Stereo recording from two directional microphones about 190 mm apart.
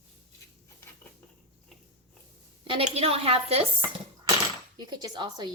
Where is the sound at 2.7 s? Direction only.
30° right (ahead or behind).